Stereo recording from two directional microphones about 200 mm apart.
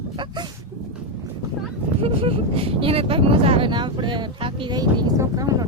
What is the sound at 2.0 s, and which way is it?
Speech, 30° right (ahead or behind).